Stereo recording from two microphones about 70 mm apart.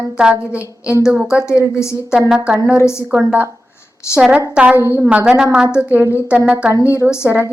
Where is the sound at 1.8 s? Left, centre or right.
Left.